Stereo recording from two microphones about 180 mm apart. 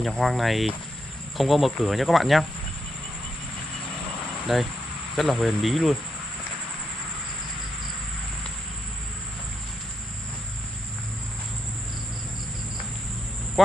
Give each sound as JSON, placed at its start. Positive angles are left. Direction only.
{"t": 0.0, "sound": "speech", "side_deg": 0}
{"t": 4.5, "sound": "speech", "side_deg": 0}